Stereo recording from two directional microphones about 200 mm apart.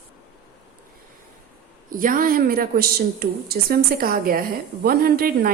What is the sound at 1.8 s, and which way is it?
A woman's voice, 45° right (ahead or behind).